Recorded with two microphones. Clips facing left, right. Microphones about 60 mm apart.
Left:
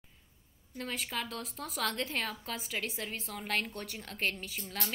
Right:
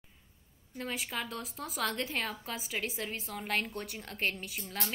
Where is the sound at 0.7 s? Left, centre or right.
Centre.